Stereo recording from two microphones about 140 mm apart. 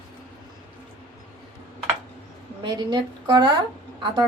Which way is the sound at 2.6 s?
35° right (ahead or behind).